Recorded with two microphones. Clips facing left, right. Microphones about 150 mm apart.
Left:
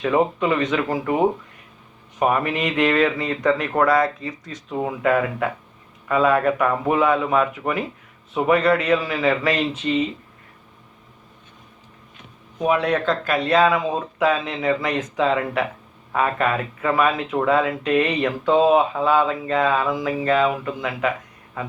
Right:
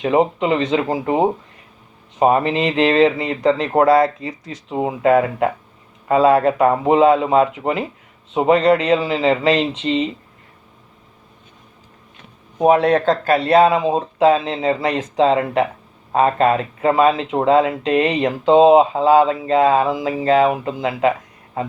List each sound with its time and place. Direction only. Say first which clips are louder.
0.0 s speech: right 3 dB; 25° right (ahead or behind)
12.5 s speech: right 6 dB; 35° right (ahead or behind)